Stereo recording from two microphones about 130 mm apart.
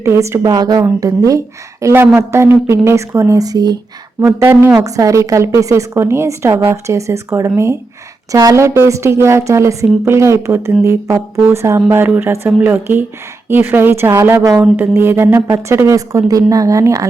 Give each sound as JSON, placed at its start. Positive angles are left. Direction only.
{"t": 0.0, "sound": "a woman's voice", "side_deg": -20}